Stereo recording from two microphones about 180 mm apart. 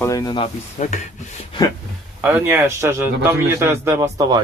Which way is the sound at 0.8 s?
40° left (ahead or behind).